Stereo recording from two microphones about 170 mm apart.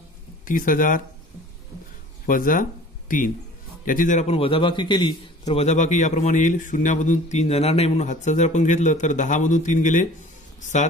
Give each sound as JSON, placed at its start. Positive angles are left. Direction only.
{"t": 0.5, "sound": "a man's voice", "side_deg": 55}
{"t": 2.2, "sound": "a man's voice", "side_deg": 55}
{"t": 3.8, "sound": "a man's voice", "side_deg": 50}